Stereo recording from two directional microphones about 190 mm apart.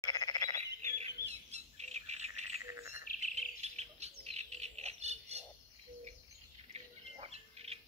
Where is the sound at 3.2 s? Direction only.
35° right (ahead or behind).